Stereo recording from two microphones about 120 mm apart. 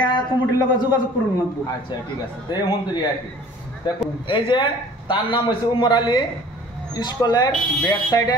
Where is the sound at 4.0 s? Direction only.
45° left (ahead or behind).